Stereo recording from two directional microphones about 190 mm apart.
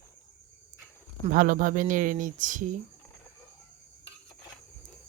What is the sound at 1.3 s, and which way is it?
Speech, 45° right (ahead or behind).